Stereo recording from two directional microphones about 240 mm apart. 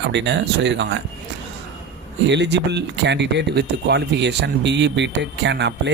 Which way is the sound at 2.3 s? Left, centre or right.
Right.